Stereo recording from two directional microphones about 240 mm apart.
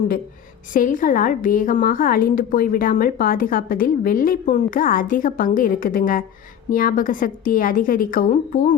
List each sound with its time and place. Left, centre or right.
0.7 s a woman's voice: left